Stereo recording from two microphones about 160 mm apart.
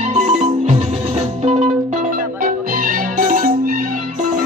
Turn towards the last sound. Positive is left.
turn(degrees=-60)  # may be behind; listen again after turning